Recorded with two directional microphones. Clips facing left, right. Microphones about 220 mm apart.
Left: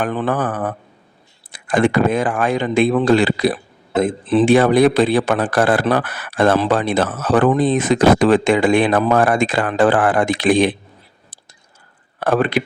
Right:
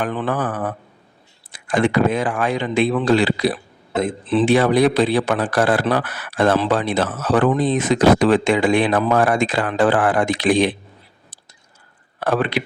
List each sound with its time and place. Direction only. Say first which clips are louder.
0.0 s speech: left 2 dB; 45° left (ahead or behind)
12.2 s speech: left 3 dB; 50° left (ahead or behind)